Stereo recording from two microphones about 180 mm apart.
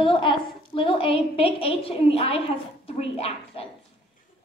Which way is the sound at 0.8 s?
30° left (ahead or behind).